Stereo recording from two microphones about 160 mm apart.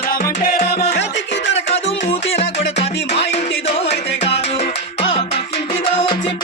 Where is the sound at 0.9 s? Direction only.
90° left.